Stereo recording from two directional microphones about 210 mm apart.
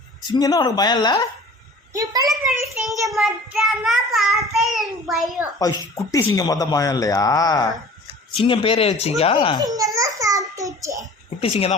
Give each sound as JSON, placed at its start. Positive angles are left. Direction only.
{"t": 0.3, "sound": "speech", "side_deg": 15}
{"t": 1.9, "sound": "a child's voice", "side_deg": -15}
{"t": 2.3, "sound": "a child's voice", "side_deg": 0}
{"t": 5.5, "sound": "a man's voice", "side_deg": 15}
{"t": 9.7, "sound": "babbling", "side_deg": -15}
{"t": 11.3, "sound": "speech", "side_deg": 25}